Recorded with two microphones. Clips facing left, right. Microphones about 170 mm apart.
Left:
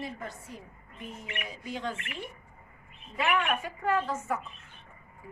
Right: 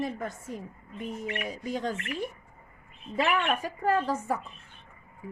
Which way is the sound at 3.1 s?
40° right (ahead or behind).